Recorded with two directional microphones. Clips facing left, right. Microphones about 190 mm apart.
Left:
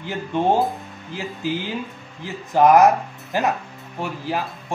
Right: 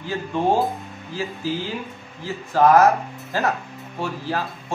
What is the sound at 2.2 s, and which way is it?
A man's voice, 15° left (ahead or behind).